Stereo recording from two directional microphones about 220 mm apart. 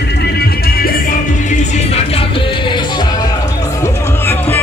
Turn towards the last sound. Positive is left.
turn(degrees=10)  # may be behind; listen again after turning